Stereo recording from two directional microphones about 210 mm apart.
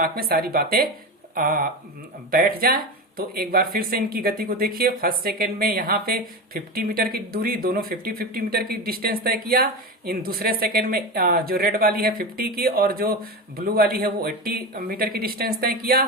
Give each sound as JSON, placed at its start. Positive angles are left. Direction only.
{"t": 0.0, "sound": "speech", "side_deg": -45}